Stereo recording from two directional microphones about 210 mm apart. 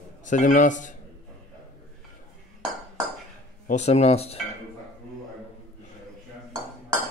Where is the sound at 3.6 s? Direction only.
35° left (ahead or behind).